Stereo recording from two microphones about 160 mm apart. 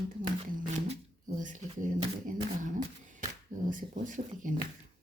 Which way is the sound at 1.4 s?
55° right (ahead or behind).